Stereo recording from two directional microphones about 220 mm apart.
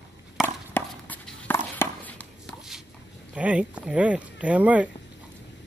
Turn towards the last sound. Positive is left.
turn(degrees=-5)  # may be behind; listen again after turning